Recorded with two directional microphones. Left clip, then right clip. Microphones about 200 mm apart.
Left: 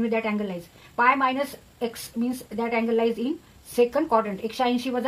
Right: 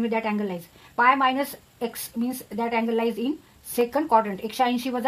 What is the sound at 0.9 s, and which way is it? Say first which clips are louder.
Speech: right 1 dB; 45° right (ahead or behind).